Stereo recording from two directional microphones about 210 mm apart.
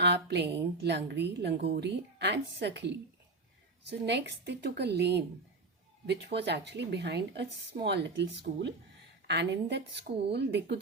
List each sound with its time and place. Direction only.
0.0 s a woman's voice: 55° right (ahead or behind)